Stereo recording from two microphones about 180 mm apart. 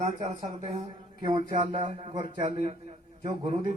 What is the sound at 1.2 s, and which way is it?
A man's voice, 25° right (ahead or behind).